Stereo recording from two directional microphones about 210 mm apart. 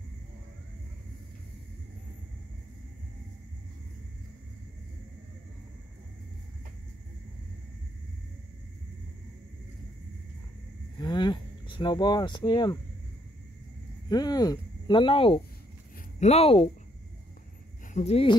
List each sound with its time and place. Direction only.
11.0 s cricket: 20° left (ahead or behind)
14.0 s speech: 20° left (ahead or behind)
17.9 s speech: 30° left (ahead or behind)